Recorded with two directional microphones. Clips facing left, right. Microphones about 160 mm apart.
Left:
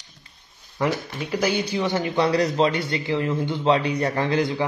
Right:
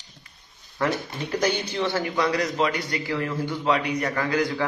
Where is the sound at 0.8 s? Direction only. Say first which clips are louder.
Left 1 dB; 10° left (ahead or behind).